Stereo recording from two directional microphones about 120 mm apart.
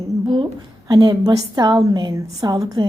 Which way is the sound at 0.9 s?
35° right (ahead or behind).